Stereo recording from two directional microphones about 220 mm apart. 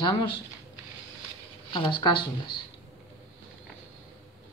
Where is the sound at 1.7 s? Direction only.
20° left (ahead or behind).